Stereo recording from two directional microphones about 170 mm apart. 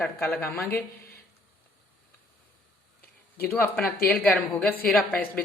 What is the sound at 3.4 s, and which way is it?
A woman's voice, 5° left (ahead or behind).